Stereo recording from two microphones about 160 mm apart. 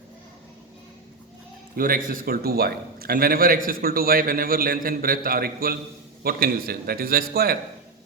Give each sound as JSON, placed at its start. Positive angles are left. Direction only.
{"t": 1.7, "sound": "a man's voice", "side_deg": -60}